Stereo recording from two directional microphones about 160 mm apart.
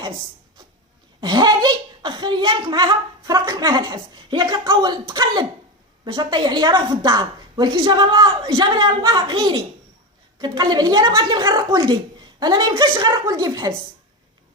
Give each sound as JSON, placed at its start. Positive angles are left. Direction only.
{"t": 1.2, "sound": "a woman's voice", "side_deg": -25}